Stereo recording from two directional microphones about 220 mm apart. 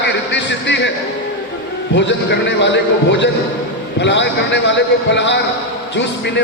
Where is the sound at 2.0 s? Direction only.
55° left (ahead or behind).